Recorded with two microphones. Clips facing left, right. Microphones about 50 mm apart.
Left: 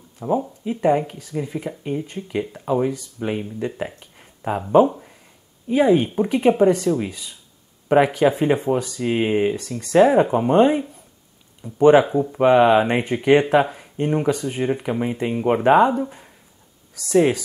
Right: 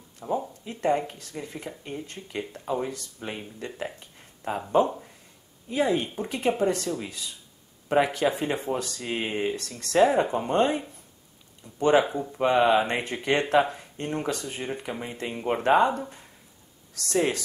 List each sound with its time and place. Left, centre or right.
0.4 s speech: centre